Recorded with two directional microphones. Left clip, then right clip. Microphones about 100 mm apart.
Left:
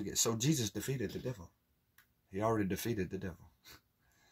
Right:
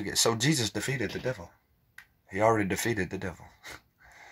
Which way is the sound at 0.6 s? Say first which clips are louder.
Right 8 dB; 50° left (ahead or behind).